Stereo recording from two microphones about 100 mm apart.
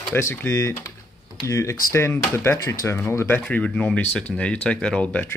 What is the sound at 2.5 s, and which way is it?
Speech, 35° left (ahead or behind).